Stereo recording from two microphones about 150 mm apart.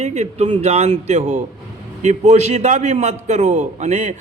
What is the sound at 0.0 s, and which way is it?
A man's voice, 50° right (ahead or behind).